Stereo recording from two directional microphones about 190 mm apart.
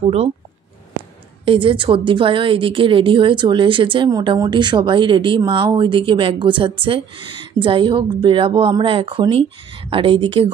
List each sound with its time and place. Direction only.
0.0 s speech: 35° right (ahead or behind)
1.4 s a woman's voice: 25° right (ahead or behind)